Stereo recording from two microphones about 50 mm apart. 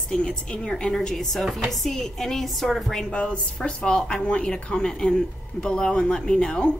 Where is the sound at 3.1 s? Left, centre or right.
Left.